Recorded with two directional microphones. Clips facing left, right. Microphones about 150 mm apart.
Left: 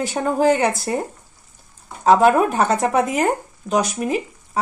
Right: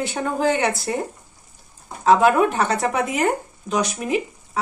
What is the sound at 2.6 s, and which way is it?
Speech, 45° left (ahead or behind).